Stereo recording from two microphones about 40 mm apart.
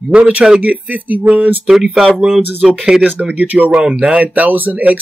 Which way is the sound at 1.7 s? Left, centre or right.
Right.